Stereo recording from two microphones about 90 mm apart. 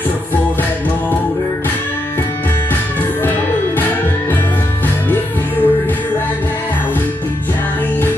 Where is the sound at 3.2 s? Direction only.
20° left (ahead or behind).